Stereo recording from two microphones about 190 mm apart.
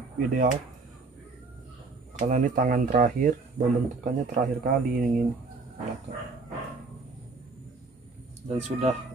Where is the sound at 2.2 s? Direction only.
45° right (ahead or behind).